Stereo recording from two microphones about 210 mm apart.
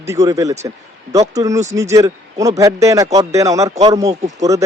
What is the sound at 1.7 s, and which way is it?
A man's voice, 15° right (ahead or behind).